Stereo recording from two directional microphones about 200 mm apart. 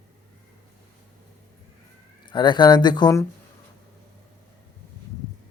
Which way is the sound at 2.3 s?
25° left (ahead or behind).